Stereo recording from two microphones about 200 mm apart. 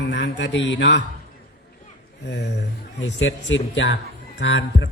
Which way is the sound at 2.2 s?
60° left (ahead or behind).